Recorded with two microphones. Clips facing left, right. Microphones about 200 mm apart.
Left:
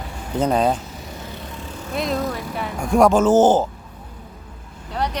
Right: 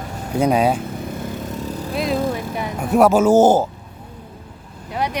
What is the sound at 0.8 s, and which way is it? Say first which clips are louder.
Vehicle: right 8 dB; 50° right (ahead or behind).